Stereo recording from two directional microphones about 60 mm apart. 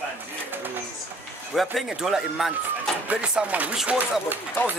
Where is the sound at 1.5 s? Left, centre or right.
Centre.